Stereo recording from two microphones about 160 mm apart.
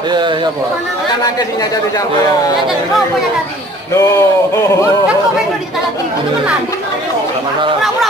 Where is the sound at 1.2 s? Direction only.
25° left (ahead or behind).